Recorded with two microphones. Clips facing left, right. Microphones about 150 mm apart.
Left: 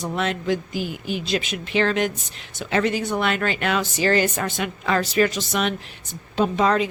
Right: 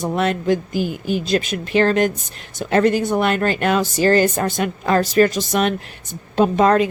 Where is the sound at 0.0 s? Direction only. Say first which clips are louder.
Right 5 dB; 50° right (ahead or behind).